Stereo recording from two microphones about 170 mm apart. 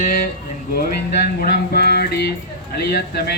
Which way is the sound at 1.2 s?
65° left (ahead or behind).